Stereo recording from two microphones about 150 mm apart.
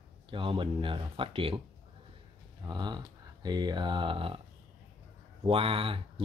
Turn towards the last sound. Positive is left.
turn(degrees=-35)  # may be behind; listen again after turning